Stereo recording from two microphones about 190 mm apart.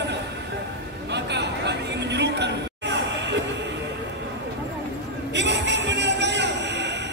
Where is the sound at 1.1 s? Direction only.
65° right (ahead or behind).